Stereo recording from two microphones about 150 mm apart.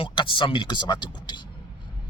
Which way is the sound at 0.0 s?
35° left (ahead or behind).